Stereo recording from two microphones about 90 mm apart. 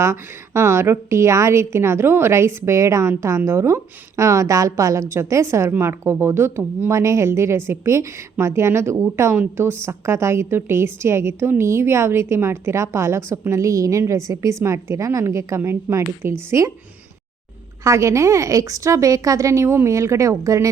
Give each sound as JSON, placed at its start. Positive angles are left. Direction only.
{"t": 0.0, "sound": "a woman's voice", "side_deg": -30}
{"t": 17.8, "sound": "a woman's voice", "side_deg": -35}